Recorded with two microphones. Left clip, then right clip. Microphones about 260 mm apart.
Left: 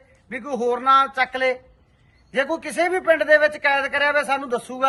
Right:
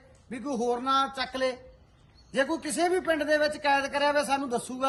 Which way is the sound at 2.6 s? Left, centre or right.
Centre.